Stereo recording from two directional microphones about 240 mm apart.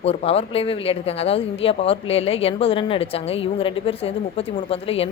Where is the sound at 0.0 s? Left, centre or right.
Left.